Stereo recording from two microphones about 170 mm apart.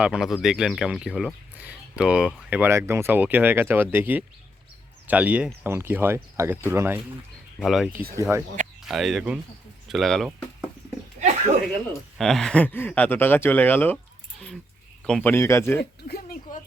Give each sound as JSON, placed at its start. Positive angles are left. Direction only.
{"t": 0.0, "sound": "speech", "side_deg": -5}
{"t": 7.6, "sound": "speech", "side_deg": 0}
{"t": 8.1, "sound": "speech", "side_deg": -15}
{"t": 8.9, "sound": "speech", "side_deg": 0}
{"t": 11.2, "sound": "a sound", "side_deg": -45}
{"t": 12.1, "sound": "speech", "side_deg": 0}
{"t": 15.0, "sound": "speech", "side_deg": 5}
{"t": 15.8, "sound": "a sound", "side_deg": 65}